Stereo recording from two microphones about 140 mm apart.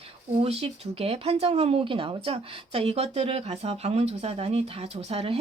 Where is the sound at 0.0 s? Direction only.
45° right (ahead or behind).